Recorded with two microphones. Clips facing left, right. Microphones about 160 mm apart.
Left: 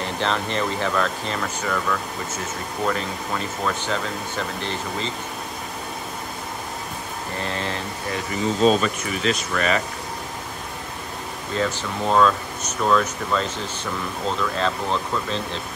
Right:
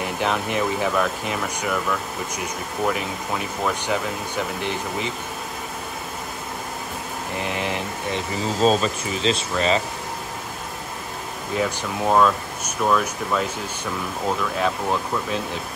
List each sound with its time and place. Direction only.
0.0 s speech: 10° right (ahead or behind)
7.3 s speech: 15° right (ahead or behind)
8.6 s speech: 30° right (ahead or behind)
11.5 s speech: 10° right (ahead or behind)